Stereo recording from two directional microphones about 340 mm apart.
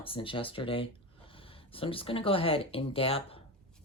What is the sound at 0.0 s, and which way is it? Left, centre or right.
Speech, centre.